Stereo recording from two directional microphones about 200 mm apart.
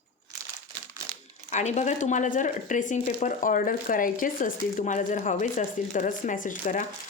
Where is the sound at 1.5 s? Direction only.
35° left (ahead or behind).